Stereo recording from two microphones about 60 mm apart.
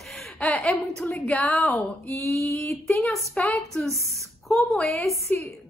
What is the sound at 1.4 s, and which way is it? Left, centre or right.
Speech, centre.